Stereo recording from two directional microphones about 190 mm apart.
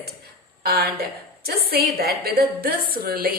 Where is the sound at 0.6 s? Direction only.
55° right (ahead or behind).